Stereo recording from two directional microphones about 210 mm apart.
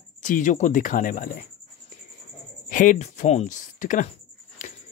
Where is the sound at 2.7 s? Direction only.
40° left (ahead or behind).